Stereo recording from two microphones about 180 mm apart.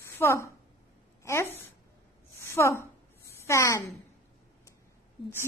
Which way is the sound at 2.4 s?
15° left (ahead or behind).